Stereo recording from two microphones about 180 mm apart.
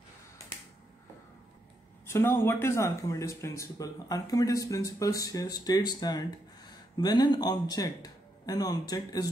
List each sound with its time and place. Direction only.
2.0 s speech: 15° left (ahead or behind)